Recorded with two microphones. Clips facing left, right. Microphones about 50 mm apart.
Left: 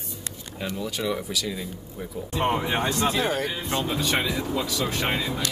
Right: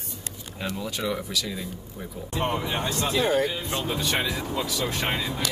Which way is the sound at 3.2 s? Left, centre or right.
Centre.